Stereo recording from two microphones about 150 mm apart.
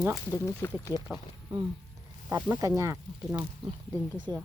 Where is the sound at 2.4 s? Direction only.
15° right (ahead or behind).